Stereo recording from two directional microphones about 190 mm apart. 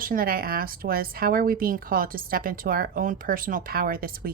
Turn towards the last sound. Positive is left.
turn(degrees=-50)  # may be behind; listen again after turning